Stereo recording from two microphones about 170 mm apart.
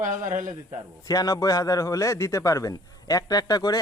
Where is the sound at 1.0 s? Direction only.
20° left (ahead or behind).